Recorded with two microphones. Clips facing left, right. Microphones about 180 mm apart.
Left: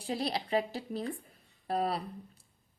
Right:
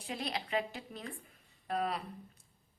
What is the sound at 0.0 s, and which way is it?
A woman's voice, 35° left (ahead or behind).